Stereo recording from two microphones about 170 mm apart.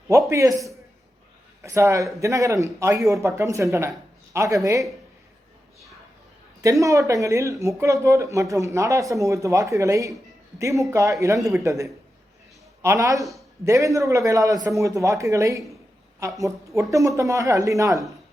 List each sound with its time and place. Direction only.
0.1 s speech: 15° right (ahead or behind)
6.6 s a woman's voice: 20° right (ahead or behind)